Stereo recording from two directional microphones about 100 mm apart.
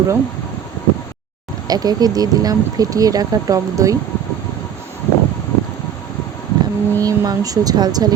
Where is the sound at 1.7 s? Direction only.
40° right (ahead or behind).